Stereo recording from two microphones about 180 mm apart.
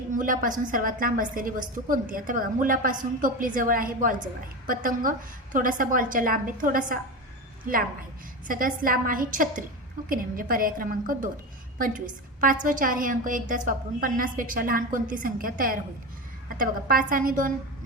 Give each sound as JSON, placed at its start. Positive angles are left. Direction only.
{"t": 0.1, "sound": "a woman's voice", "side_deg": -45}
{"t": 8.4, "sound": "a woman's voice", "side_deg": -50}